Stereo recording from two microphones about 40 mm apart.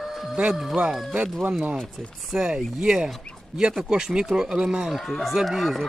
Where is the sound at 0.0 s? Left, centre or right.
Centre.